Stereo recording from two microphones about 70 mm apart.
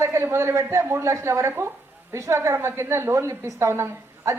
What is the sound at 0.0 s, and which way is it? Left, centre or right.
A woman's voice, right.